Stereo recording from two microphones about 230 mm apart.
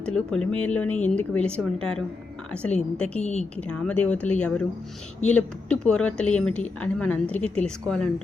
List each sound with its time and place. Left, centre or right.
0.0 s a woman's voice: centre